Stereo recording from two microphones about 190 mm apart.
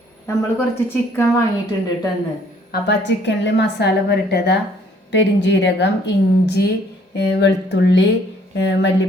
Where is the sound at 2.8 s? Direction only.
70° left (ahead or behind).